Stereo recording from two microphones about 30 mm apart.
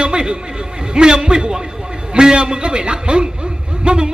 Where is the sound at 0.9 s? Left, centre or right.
Right.